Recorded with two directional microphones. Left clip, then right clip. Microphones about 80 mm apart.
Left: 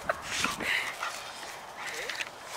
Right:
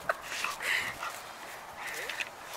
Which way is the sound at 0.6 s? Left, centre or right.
Centre.